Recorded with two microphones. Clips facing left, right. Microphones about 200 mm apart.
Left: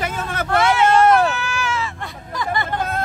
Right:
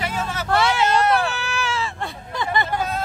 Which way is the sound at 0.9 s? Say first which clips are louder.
Left 5 dB; 45° left (ahead or behind).